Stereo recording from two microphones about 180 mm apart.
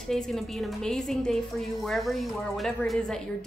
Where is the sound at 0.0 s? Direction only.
Centre (ahead or behind).